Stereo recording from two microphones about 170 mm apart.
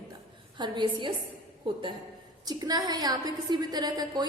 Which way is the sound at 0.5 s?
25° right (ahead or behind).